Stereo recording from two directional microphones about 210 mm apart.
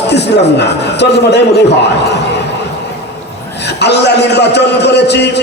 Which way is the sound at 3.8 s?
55° left (ahead or behind).